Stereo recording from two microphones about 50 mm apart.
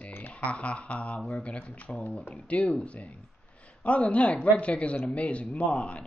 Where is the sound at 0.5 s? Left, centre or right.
Left.